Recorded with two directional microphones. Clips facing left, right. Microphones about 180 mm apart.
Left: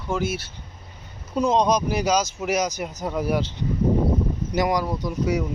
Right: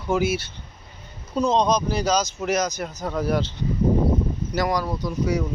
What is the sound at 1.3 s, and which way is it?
Speech, 10° left (ahead or behind).